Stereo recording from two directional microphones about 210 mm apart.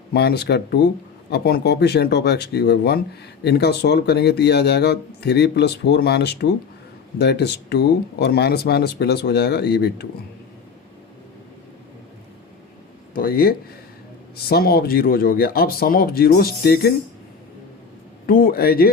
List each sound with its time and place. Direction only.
0.1 s speech: 50° left (ahead or behind)
13.1 s speech: 45° left (ahead or behind)
18.3 s speech: 45° left (ahead or behind)